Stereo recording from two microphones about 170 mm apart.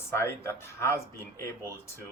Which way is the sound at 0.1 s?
15° left (ahead or behind).